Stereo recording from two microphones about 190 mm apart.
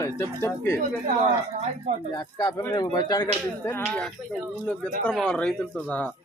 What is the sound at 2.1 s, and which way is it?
Speech, 20° left (ahead or behind).